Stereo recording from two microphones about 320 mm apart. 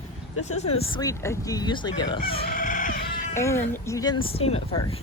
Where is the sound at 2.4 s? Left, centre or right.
Left.